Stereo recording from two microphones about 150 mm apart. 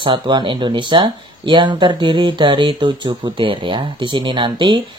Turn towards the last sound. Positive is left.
turn(degrees=-35)  # may be behind; listen again after turning